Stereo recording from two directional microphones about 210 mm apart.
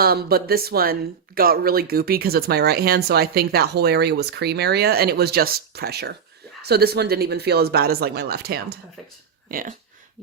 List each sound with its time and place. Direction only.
0.0 s speech: 45° right (ahead or behind)